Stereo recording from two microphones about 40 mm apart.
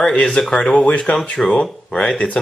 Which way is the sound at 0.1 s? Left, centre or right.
Left.